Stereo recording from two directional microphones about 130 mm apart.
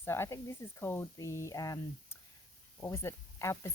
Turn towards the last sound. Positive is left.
turn(degrees=20)  # may be behind; listen again after turning